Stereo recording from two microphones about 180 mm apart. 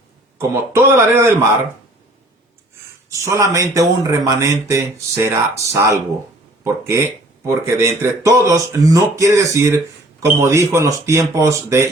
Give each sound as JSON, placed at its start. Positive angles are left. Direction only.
{"t": 0.3, "sound": "a man's voice", "side_deg": -15}
{"t": 3.1, "sound": "a man's voice", "side_deg": -15}